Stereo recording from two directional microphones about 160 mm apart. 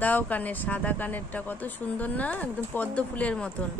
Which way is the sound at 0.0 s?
10° left (ahead or behind).